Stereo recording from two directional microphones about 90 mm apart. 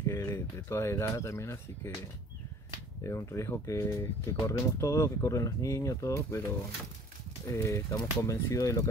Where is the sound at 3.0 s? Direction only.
35° left (ahead or behind).